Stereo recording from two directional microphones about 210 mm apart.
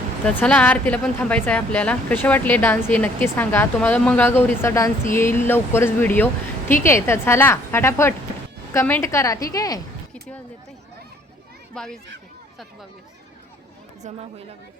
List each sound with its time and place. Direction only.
0.3 s speech: 5° left (ahead or behind)
11.7 s a child's voice: 5° left (ahead or behind)
14.0 s speech: 30° right (ahead or behind)